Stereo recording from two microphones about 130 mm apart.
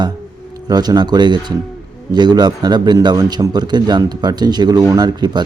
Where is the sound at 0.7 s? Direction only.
30° right (ahead or behind).